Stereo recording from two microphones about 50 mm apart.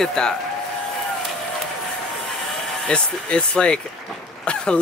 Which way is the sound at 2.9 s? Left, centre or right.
Centre.